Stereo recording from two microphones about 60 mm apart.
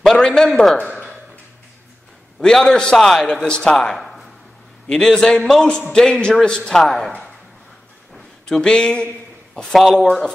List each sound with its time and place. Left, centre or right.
0.0 s a man's voice: centre
2.4 s a man's voice: centre
3.8 s a sound: centre
4.8 s a man's voice: centre
5.7 s a man's voice: centre
6.8 s speech: centre
8.1 s a sound: centre
9.6 s speech: centre